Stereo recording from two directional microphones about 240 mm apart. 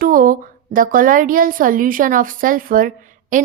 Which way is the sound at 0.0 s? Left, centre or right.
Right.